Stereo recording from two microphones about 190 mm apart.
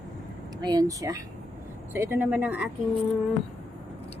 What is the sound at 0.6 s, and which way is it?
Speech, 20° right (ahead or behind).